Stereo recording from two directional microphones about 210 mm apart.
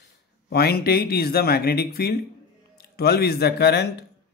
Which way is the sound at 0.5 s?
50° left (ahead or behind).